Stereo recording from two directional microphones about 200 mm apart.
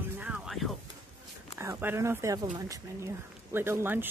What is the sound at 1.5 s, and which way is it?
Speech, 15° right (ahead or behind).